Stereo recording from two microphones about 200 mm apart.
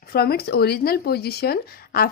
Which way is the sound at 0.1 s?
50° left (ahead or behind).